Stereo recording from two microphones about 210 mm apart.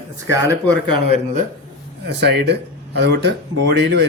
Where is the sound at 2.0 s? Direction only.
55° right (ahead or behind).